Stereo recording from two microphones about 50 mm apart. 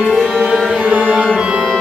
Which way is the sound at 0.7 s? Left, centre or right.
Centre.